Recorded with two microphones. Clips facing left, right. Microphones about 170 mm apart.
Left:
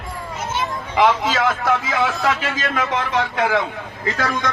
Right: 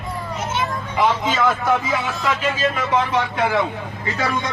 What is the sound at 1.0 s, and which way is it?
Speech, 90° left.